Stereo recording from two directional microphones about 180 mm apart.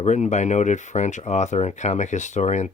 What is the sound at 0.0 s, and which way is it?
Speech, 40° left (ahead or behind).